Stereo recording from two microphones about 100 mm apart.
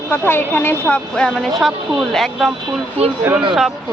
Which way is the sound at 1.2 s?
Centre (ahead or behind).